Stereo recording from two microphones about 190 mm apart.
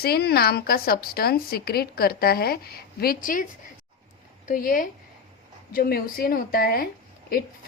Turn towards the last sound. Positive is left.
turn(degrees=50)  # may be behind; listen again after turning